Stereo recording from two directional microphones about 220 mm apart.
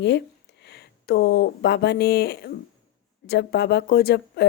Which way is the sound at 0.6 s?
50° left (ahead or behind).